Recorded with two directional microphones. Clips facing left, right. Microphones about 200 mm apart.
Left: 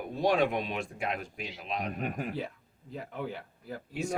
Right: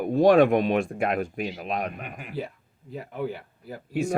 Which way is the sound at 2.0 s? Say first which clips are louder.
Left 5 dB; 40° left (ahead or behind).